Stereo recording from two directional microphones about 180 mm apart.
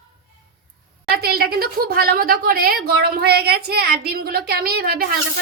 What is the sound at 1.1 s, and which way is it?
A woman's voice, 60° right (ahead or behind).